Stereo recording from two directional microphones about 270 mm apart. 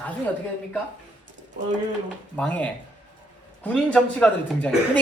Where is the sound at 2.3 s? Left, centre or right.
Centre.